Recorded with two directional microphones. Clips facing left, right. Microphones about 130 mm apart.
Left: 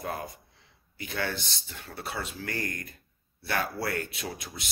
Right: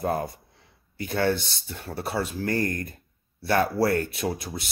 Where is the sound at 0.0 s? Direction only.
40° right (ahead or behind).